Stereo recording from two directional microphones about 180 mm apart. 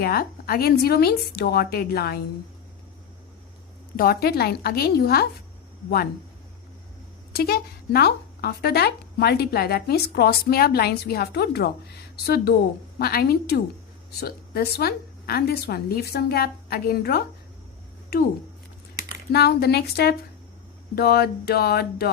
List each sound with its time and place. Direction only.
0.0 s speech: 60° left (ahead or behind)
3.9 s speech: 55° left (ahead or behind)
7.3 s speech: 60° left (ahead or behind)
19.3 s speech: 60° left (ahead or behind)